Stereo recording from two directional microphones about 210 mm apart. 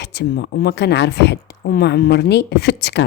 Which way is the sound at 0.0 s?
55° left (ahead or behind).